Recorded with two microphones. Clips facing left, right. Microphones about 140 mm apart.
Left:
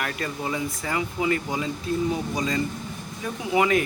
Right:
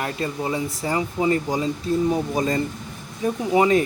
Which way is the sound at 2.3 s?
50° right (ahead or behind).